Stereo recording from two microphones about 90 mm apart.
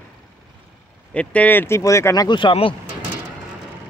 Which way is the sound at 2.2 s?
60° left (ahead or behind).